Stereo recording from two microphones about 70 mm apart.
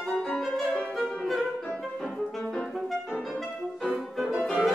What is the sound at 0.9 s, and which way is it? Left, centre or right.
Music, centre.